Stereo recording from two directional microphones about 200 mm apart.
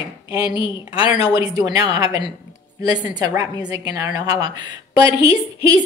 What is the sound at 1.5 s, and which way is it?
A woman's voice, 20° right (ahead or behind).